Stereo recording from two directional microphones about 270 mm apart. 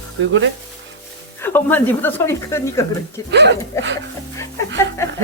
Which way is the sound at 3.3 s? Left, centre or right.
Right.